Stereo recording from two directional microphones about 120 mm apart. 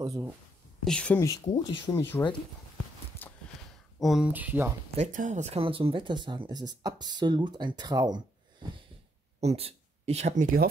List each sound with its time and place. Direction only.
0.1 s speech: 20° right (ahead or behind)
0.8 s speech: 10° left (ahead or behind)
1.2 s speech: 30° left (ahead or behind)
3.2 s a sound: 15° left (ahead or behind)
4.0 s speech: 5° right (ahead or behind)
4.3 s speech: 15° right (ahead or behind)
4.9 s speech: 80° right; by 8.2 s 35° right (ahead or behind)
9.4 s speech: 60° right (ahead or behind); by 10.5 s 80° right